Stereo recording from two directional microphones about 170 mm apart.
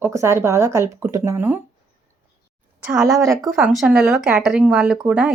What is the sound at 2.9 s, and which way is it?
Speech, 20° right (ahead or behind).